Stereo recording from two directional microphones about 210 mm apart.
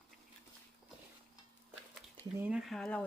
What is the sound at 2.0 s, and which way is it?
Speech, 10° right (ahead or behind).